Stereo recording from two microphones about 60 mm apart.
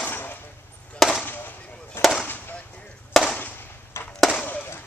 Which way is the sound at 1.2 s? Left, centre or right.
Left.